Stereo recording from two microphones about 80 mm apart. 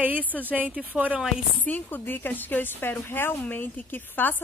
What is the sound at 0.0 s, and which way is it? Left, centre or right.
Speech, right.